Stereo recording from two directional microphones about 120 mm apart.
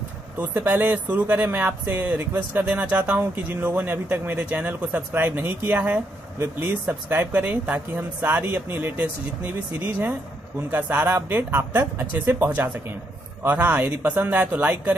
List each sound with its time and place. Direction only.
0.4 s speech: 15° right (ahead or behind)